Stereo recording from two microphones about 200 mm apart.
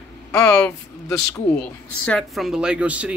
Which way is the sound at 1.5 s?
5° left (ahead or behind).